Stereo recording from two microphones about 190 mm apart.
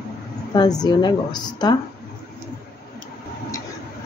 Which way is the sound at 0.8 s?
20° left (ahead or behind).